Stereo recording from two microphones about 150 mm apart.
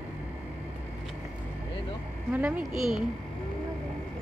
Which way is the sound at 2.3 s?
5° right (ahead or behind).